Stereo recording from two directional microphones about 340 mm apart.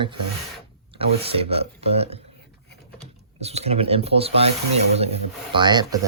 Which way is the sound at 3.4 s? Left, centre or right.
Centre.